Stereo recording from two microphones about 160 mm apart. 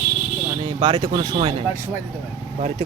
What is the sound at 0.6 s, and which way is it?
Speech, 40° right (ahead or behind).